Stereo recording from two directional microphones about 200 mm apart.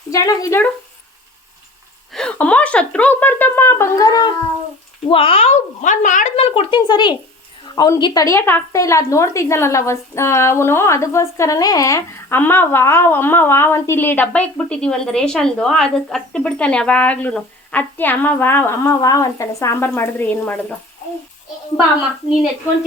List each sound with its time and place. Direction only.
0.1 s a woman's voice: 15° left (ahead or behind)
2.1 s a woman's voice: 5° left (ahead or behind)